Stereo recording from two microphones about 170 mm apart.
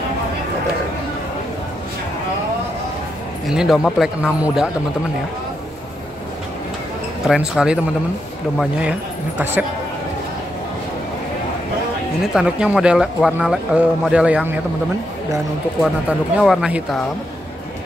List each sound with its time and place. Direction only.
3.4 s speech: centre (ahead or behind)
7.2 s speech: 5° right (ahead or behind)
12.4 s speech: 5° right (ahead or behind)
15.8 s speech: centre (ahead or behind)